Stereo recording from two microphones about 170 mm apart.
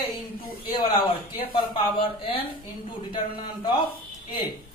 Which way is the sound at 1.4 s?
30° left (ahead or behind).